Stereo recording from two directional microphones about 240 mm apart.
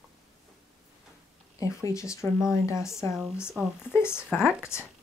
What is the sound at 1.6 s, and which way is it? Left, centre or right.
Speech, centre.